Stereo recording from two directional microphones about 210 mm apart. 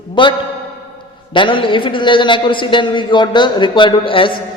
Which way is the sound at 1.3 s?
25° left (ahead or behind).